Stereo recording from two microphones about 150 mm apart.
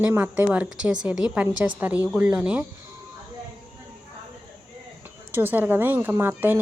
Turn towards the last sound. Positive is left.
turn(degrees=-10)  # may be behind; listen again after turning